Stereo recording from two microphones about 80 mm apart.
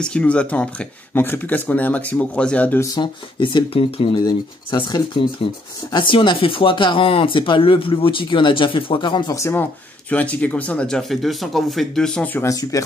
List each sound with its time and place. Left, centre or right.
0.0 s speech: centre
3.0 s speech: left
9.3 s speech: left
9.6 s speech: centre
12.4 s speech: left